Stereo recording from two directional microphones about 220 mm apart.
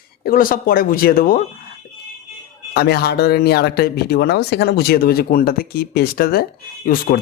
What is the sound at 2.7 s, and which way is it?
Speech, 45° left (ahead or behind).